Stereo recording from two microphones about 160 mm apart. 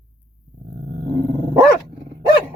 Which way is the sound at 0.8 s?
65° right (ahead or behind).